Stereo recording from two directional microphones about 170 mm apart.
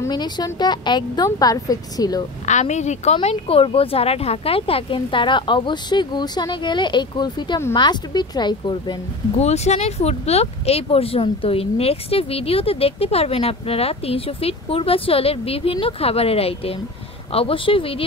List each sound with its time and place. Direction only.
0.0 s a woman's voice: 25° left (ahead or behind)
2.4 s a woman's voice: 45° left (ahead or behind); by 9.4 s 25° left (ahead or behind)
9.4 s speech: 40° left (ahead or behind)